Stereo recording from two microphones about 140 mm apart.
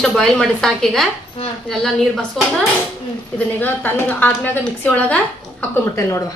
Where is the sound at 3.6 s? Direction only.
15° left (ahead or behind).